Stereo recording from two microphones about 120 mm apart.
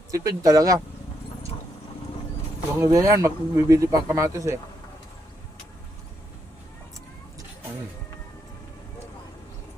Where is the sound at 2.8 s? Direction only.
25° right (ahead or behind).